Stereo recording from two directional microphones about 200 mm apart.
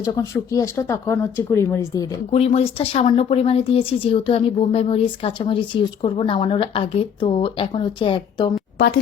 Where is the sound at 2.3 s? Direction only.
30° left (ahead or behind).